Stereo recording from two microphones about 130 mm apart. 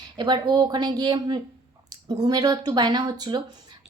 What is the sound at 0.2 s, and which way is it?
A woman's voice, 35° right (ahead or behind).